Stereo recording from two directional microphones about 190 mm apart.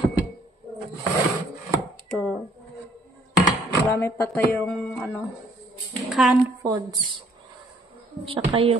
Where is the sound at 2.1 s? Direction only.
10° left (ahead or behind).